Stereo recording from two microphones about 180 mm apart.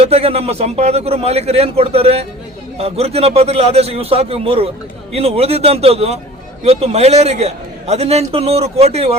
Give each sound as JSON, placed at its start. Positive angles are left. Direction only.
{"t": 0.0, "sound": "a man's voice", "side_deg": -35}